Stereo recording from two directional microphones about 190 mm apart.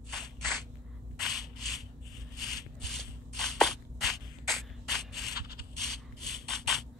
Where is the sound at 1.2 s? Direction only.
Centre (ahead or behind).